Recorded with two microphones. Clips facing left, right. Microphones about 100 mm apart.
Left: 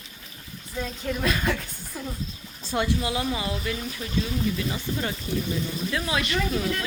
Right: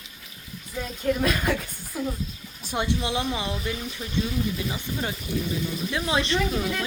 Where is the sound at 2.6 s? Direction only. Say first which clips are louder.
Left 1 dB; 20° right (ahead or behind).